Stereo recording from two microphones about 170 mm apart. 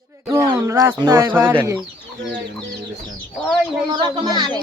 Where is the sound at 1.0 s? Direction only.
25° right (ahead or behind).